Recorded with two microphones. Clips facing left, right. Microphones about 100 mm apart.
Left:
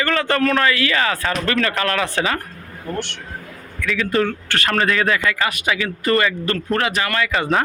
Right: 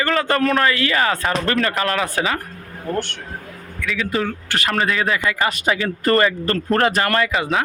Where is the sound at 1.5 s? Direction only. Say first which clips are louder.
Even; 5° right (ahead or behind).